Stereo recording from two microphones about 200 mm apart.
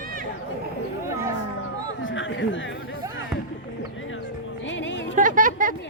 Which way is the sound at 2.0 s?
70° left (ahead or behind).